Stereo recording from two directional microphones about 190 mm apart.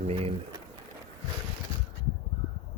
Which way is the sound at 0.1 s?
30° right (ahead or behind).